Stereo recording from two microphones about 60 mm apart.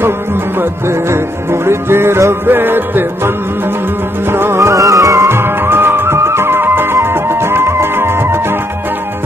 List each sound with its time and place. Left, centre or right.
0.6 s music: right
2.4 s music: right
4.6 s music: right